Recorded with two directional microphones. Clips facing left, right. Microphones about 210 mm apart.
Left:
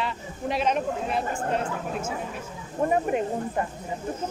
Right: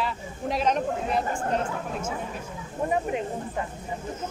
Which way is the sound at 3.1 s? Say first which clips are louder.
Left 3 dB; 50° left (ahead or behind).